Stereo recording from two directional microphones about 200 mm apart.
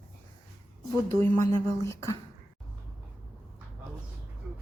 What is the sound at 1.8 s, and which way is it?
Speech, 15° left (ahead or behind).